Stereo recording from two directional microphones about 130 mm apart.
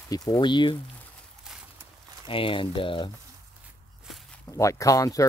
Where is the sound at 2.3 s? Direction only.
45° left (ahead or behind).